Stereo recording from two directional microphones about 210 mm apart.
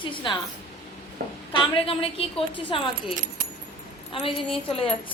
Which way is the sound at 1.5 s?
25° left (ahead or behind).